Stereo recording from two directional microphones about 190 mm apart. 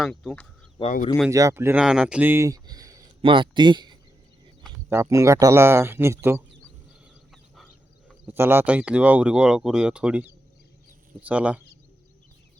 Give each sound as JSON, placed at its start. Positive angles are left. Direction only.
{"t": 0.0, "sound": "speech", "side_deg": 0}
{"t": 0.8, "sound": "speech", "side_deg": 35}
{"t": 1.3, "sound": "speech", "side_deg": -15}
{"t": 8.3, "sound": "speech", "side_deg": -10}